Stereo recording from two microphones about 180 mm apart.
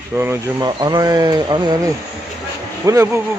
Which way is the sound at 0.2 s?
20° right (ahead or behind).